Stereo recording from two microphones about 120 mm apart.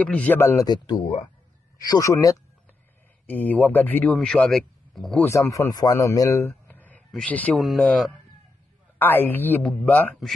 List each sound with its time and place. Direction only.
0.0 s a man's voice: 10° left (ahead or behind)
0.7 s speech: 35° left (ahead or behind)
3.3 s a man's voice: 15° left (ahead or behind)
5.2 s a man's voice: 25° left (ahead or behind)
7.5 s speech: centre (ahead or behind)
8.9 s a man's voice: 15° left (ahead or behind)